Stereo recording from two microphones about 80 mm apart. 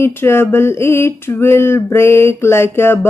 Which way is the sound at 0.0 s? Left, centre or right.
Left.